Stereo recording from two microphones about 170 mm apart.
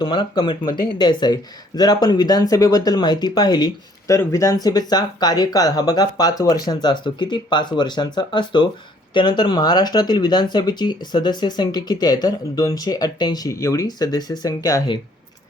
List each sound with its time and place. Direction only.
0.0 s speech: 30° left (ahead or behind)